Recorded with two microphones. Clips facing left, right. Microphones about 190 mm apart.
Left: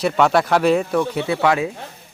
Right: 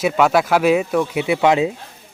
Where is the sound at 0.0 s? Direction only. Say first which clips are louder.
Right 1 dB; 5° right (ahead or behind).